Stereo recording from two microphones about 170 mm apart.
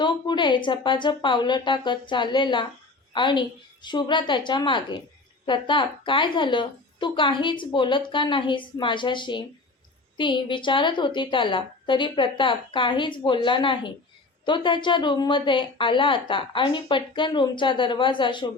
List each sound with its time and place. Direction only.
0.0 s a woman's voice: 25° left (ahead or behind)